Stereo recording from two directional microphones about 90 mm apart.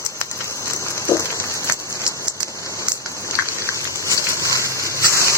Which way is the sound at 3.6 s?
35° left (ahead or behind).